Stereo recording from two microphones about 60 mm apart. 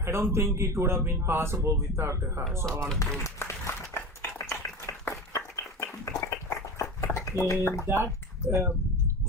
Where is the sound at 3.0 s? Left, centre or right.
Left.